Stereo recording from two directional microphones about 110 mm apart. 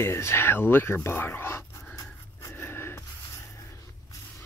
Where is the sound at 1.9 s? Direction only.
30° left (ahead or behind).